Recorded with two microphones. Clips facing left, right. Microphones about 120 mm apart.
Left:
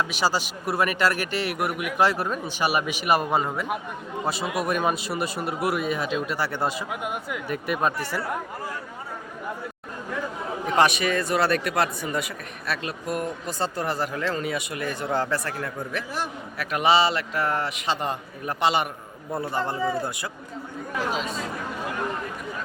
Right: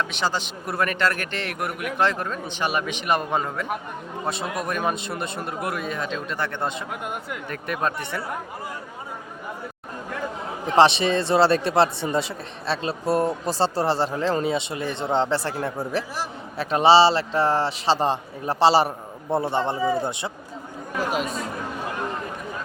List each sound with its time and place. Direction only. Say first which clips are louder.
0.0 s speech: left 1 dB; 5° left (ahead or behind)
10.8 s speech: right 4 dB; 30° right (ahead or behind)